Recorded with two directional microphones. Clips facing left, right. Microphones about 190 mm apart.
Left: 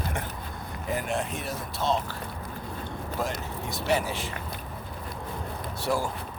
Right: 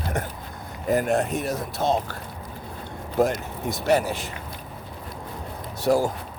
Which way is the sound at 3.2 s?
55° right (ahead or behind).